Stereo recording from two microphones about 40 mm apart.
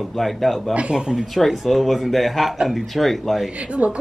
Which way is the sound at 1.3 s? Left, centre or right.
Centre.